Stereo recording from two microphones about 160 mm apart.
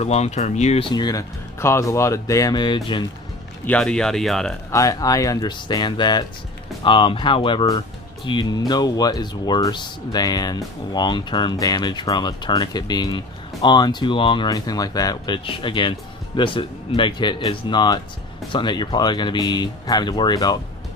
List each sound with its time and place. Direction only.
0.0 s speech: 40° left (ahead or behind)
3.6 s speech: 5° left (ahead or behind)
4.6 s speech: 20° left (ahead or behind)